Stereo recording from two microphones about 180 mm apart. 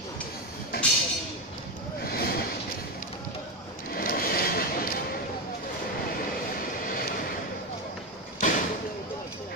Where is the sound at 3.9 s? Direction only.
55° left (ahead or behind).